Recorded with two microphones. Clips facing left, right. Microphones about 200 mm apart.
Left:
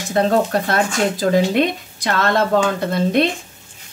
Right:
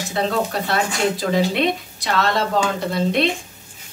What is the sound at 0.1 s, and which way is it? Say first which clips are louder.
Stir: left 6 dB; 50° left (ahead or behind).